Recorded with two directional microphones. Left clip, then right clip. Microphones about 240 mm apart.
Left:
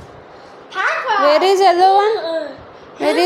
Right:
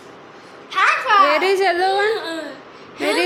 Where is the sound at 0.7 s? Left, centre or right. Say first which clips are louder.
Right 2 dB; right.